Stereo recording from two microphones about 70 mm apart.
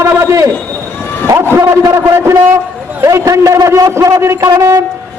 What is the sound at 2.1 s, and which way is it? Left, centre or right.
A man's voice, right.